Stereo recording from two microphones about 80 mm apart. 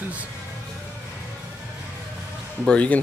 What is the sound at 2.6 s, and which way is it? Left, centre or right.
Speech, centre.